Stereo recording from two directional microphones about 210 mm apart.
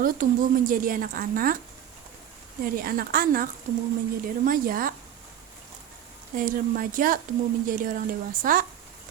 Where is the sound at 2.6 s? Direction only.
45° right (ahead or behind).